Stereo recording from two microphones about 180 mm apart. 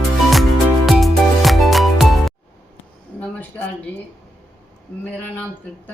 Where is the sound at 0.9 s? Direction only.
Centre (ahead or behind).